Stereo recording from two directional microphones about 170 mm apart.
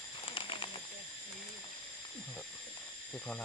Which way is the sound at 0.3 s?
30° left (ahead or behind).